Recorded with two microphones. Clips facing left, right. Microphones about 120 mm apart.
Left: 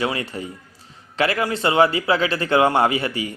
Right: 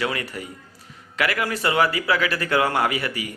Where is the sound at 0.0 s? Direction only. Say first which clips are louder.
Left 3 dB; 25° left (ahead or behind).